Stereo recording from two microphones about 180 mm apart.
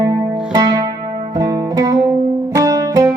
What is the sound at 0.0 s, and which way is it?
Music, 20° right (ahead or behind).